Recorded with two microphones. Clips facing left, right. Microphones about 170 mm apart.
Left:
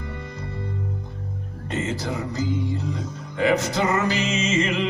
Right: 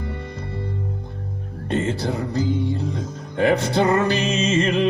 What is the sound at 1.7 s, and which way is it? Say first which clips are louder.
Music: right 4 dB; 55° right (ahead or behind).